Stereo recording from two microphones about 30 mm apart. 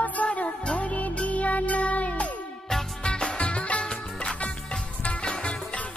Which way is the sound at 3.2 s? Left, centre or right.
Left.